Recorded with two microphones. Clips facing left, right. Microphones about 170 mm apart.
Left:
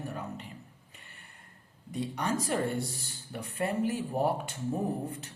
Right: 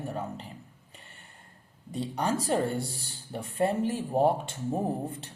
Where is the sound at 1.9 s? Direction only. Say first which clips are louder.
Right 2 dB; 30° right (ahead or behind).